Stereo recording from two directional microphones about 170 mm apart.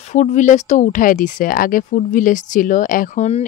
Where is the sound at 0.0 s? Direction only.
45° left (ahead or behind).